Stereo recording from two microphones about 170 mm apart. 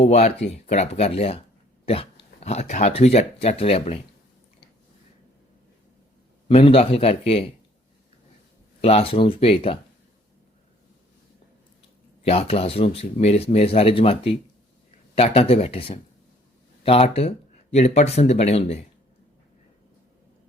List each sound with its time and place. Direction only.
0.0 s speech: 40° left (ahead or behind)
6.5 s speech: 35° left (ahead or behind)
8.8 s speech: 35° left (ahead or behind)
12.2 s speech: 35° left (ahead or behind)